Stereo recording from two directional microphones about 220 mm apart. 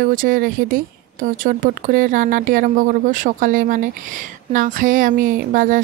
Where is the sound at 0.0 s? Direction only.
40° right (ahead or behind).